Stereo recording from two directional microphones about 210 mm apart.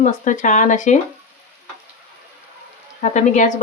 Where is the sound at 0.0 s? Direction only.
35° left (ahead or behind).